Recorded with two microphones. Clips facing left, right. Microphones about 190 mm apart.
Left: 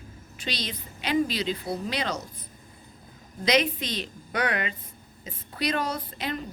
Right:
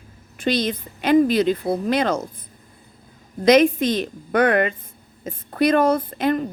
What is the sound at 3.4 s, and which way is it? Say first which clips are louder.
A woman's voice: right 10 dB; 50° right (ahead or behind).